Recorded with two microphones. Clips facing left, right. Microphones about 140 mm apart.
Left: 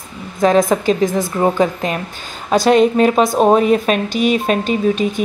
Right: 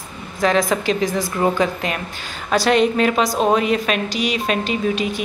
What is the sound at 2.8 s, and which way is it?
A woman's voice, 40° left (ahead or behind).